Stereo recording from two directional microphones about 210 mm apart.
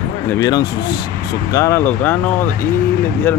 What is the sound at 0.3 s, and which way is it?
Speech, 15° left (ahead or behind).